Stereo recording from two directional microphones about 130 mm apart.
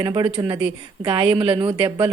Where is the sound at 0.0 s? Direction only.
30° right (ahead or behind).